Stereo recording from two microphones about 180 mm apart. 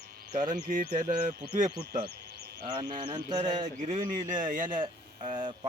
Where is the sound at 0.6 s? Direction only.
55° right (ahead or behind).